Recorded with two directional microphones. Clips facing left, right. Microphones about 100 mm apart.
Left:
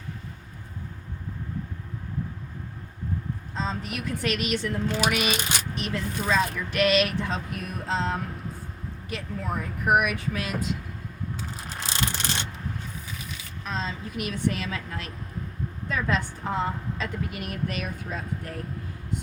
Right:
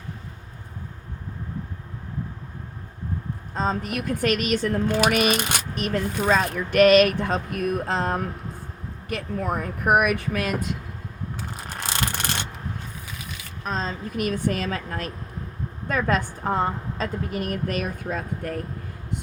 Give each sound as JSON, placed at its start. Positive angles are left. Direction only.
{"t": 3.5, "sound": "speech", "side_deg": -50}
{"t": 11.3, "sound": "a sound", "side_deg": -55}
{"t": 13.7, "sound": "speech", "side_deg": -45}